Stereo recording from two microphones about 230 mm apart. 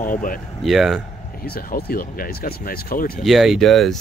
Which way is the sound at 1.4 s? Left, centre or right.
Left.